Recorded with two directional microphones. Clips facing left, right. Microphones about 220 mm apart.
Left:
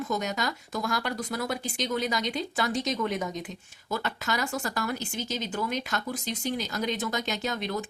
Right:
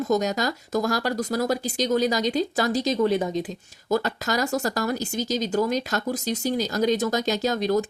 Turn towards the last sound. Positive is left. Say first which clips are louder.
# right 8 dB
turn(degrees=-40)  # may be behind; listen again after turning